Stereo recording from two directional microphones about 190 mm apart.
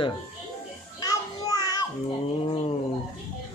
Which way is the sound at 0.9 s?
20° left (ahead or behind).